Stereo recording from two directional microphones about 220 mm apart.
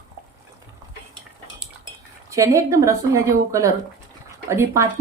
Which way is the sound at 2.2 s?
15° right (ahead or behind).